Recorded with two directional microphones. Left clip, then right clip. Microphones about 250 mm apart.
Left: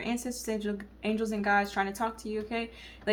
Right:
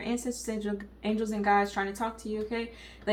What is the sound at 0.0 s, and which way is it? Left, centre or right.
A woman's voice, left.